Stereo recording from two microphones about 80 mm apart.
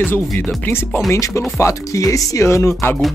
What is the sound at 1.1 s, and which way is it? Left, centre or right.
Speech, left.